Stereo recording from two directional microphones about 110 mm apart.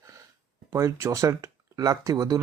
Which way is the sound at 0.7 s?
25° right (ahead or behind).